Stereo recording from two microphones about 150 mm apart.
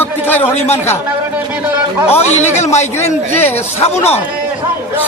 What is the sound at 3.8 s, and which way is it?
Speech, 45° left (ahead or behind).